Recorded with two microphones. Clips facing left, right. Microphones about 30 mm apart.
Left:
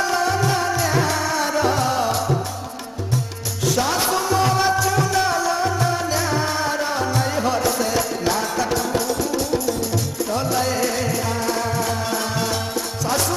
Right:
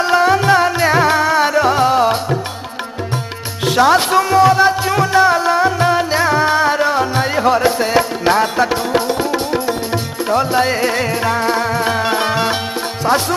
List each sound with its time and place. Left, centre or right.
0.0 s music: right
3.6 s music: right
4.4 s music: right
4.8 s music: right